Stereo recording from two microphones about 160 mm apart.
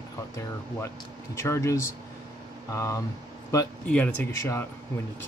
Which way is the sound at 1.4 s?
15° left (ahead or behind).